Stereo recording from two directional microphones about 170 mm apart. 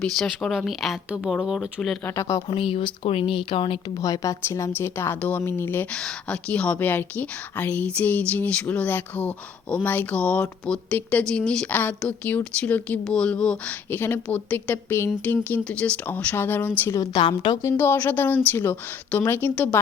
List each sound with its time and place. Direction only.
0.0 s speech: centre (ahead or behind)
2.0 s a woman's voice: 20° left (ahead or behind)
2.6 s speech: 30° left (ahead or behind)
4.0 s a woman's voice: 20° left (ahead or behind)